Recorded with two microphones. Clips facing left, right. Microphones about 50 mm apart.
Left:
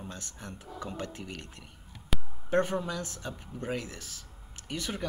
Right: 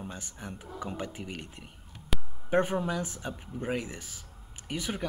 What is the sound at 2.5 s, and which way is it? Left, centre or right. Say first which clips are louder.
Speech: right 1 dB; centre.